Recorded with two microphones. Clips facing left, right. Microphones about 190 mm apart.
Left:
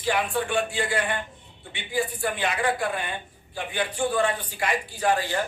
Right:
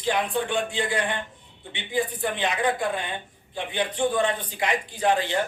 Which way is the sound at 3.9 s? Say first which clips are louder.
Right 1 dB; 20° right (ahead or behind).